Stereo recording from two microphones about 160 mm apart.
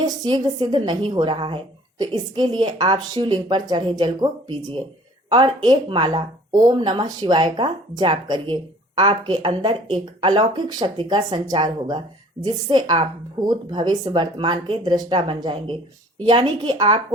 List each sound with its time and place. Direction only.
0.0 s speech: 25° right (ahead or behind)
5.3 s speech: 30° right (ahead or behind)